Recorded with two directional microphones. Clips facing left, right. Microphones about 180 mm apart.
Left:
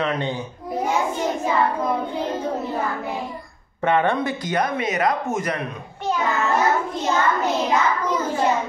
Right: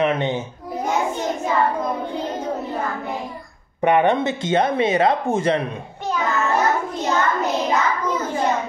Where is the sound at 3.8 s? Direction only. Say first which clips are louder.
Right 3 dB; 20° right (ahead or behind).